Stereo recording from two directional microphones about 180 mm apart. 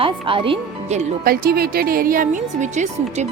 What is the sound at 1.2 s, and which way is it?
A woman's voice, 55° right (ahead or behind).